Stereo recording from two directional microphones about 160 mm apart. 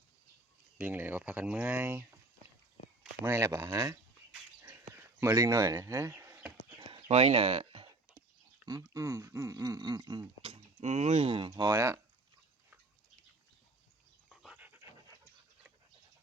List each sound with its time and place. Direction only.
0.8 s speech: 10° right (ahead or behind)
3.2 s speech: 20° right (ahead or behind)
4.6 s bee: 15° right (ahead or behind)
6.7 s a sound: 35° right (ahead or behind)
8.6 s speech: 25° right (ahead or behind)
14.3 s dog: 5° right (ahead or behind)